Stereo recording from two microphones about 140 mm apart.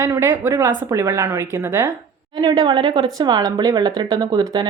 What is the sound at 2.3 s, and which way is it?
Speech, 30° right (ahead or behind).